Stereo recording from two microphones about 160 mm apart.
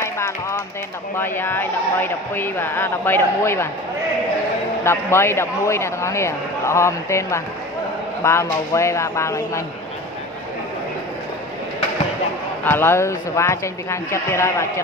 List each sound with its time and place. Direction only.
0.0 s music: 20° left (ahead or behind)
1.1 s speech: 15° left (ahead or behind)
4.8 s speech: 15° left (ahead or behind)
12.6 s speech: 15° left (ahead or behind)